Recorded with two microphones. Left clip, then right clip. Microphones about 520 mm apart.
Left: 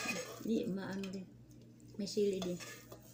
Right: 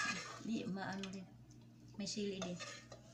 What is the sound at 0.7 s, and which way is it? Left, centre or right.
Speech, right.